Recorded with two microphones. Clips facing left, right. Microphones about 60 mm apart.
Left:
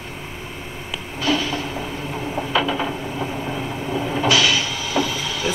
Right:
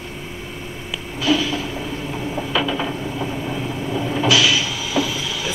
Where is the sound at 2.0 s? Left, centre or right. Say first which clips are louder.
Even; left.